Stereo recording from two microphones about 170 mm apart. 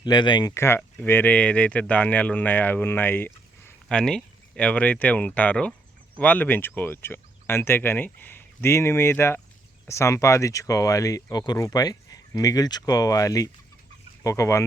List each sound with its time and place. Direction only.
0.0 s speech: 25° left (ahead or behind)